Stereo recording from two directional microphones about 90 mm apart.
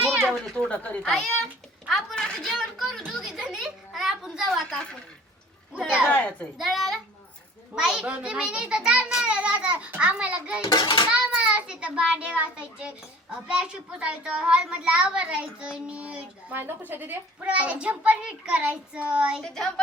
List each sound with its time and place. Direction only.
0.0 s children playing: 15° right (ahead or behind)
0.3 s speech: 5° left (ahead or behind)
1.0 s speech: centre (ahead or behind)
1.9 s a sound: 5° left (ahead or behind)
5.7 s speech: 10° right (ahead or behind)
6.1 s speech: 15° left (ahead or behind)
6.6 s speech: centre (ahead or behind)
10.6 s a child's voice: 45° left (ahead or behind)
11.1 s speech: 10° right (ahead or behind)
19.4 s speech: 5° left (ahead or behind)